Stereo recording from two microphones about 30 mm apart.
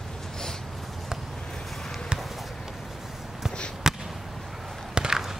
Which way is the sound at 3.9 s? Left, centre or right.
Centre.